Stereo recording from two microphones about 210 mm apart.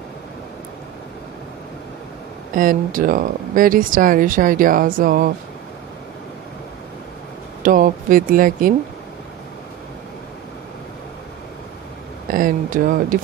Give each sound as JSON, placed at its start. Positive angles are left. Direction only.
{"t": 2.5, "sound": "speech", "side_deg": -40}
{"t": 7.6, "sound": "speech", "side_deg": -40}
{"t": 12.3, "sound": "speech", "side_deg": -40}